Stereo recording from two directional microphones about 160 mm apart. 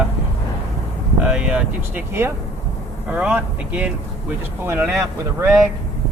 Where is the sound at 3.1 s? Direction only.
10° right (ahead or behind).